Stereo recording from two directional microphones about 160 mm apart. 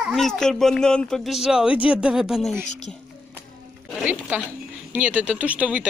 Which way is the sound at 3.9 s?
10° right (ahead or behind).